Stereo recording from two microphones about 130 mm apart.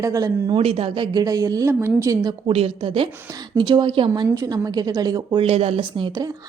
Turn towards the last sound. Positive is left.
turn(degrees=-35)  # may be behind; listen again after turning